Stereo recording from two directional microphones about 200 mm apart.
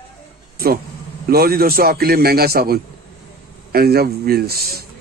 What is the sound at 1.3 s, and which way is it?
Speech, 50° right (ahead or behind).